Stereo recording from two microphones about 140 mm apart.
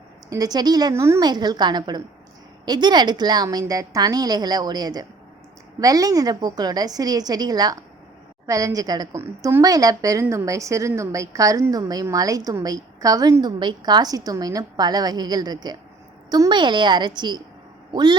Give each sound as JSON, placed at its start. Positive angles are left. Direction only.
{"t": 0.3, "sound": "a woman's voice", "side_deg": -25}
{"t": 1.3, "sound": "a woman's voice", "side_deg": -30}